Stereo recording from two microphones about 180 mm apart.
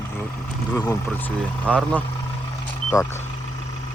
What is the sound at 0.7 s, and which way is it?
Speech, 15° left (ahead or behind).